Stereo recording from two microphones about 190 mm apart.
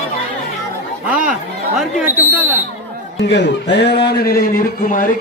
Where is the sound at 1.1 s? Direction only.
5° right (ahead or behind).